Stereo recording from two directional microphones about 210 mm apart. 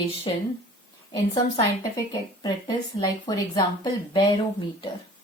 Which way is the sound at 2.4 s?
20° left (ahead or behind).